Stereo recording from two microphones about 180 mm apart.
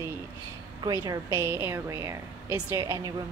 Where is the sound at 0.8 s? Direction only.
20° right (ahead or behind).